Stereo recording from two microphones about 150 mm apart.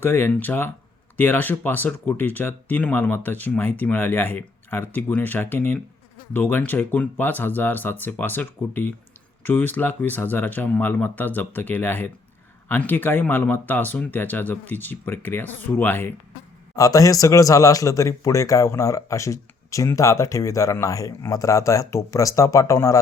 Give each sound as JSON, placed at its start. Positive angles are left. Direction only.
{"t": 0.0, "sound": "speech", "side_deg": 15}